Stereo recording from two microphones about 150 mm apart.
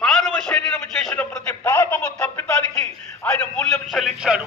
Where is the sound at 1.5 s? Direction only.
15° left (ahead or behind).